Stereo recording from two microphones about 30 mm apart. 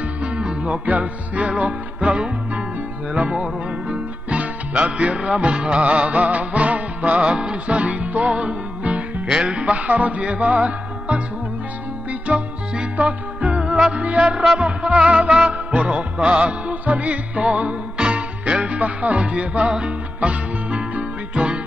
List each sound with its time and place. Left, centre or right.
0.2 s music: right
0.8 s music: right
3.2 s music: right
5.9 s music: right
7.2 s music: right
7.7 s music: right
9.3 s music: right
9.7 s music: right
14.2 s music: right
14.6 s music: right
17.9 s music: right